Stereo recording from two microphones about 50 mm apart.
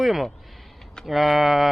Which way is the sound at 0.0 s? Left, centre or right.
Centre.